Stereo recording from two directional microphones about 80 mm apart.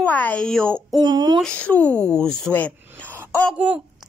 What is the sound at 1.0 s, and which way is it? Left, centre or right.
Speech, right.